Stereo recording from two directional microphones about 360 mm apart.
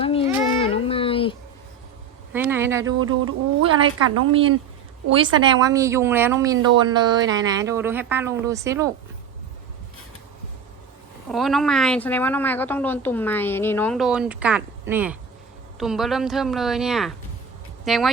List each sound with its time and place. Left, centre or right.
0.0 s child singing: centre
0.6 s a sound: centre
2.3 s speech: centre
3.0 s a woman's voice: right
4.3 s speech: centre
11.3 s a woman's voice: centre